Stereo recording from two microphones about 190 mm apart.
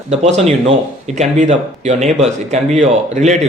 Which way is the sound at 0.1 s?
35° right (ahead or behind).